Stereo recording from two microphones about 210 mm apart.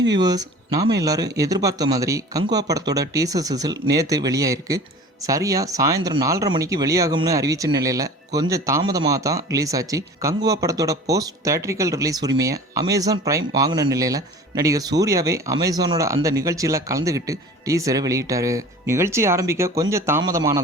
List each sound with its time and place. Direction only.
0.2 s speech: 20° right (ahead or behind)